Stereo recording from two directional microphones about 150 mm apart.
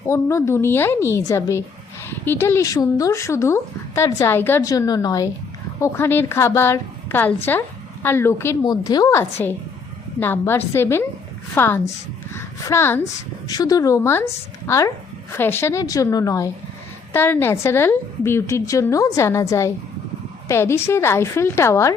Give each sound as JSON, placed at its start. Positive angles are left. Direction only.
{"t": 0.0, "sound": "a woman's voice", "side_deg": 20}